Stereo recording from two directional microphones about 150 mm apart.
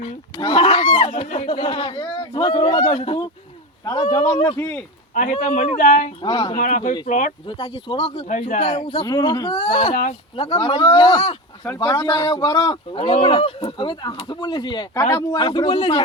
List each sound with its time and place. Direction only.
0.0 s a sound: 35° left (ahead or behind)
1.5 s speech: 35° left (ahead or behind)
4.5 s speech: 15° left (ahead or behind)
5.1 s speech: 60° left (ahead or behind)
6.2 s speech: 30° left (ahead or behind)
6.6 s speech: 60° left (ahead or behind)
7.4 s speech: 35° left (ahead or behind)
8.3 s a man's voice: 50° left (ahead or behind)
8.7 s speech: 35° left (ahead or behind)
9.9 s speech: 65° left (ahead or behind)
10.3 s speech: 35° left (ahead or behind)